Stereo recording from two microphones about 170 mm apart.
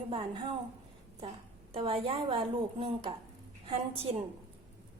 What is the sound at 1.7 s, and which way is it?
A woman's voice, 35° right (ahead or behind).